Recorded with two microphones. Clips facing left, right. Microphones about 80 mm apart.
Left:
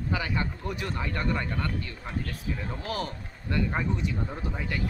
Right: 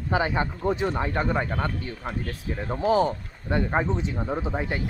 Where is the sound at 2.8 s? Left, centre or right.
Right.